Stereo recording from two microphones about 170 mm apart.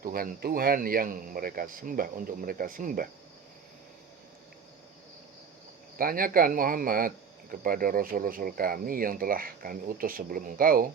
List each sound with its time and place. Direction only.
0.0 s speech: 60° right (ahead or behind)
6.0 s speech: 55° right (ahead or behind)